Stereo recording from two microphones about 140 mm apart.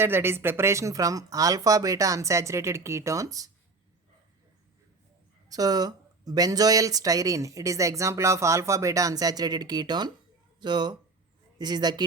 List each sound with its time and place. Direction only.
0.0 s speech: 15° right (ahead or behind)
5.5 s speech: 25° right (ahead or behind)